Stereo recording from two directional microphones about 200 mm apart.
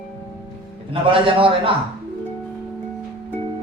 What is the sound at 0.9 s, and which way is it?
Speech, 25° right (ahead or behind).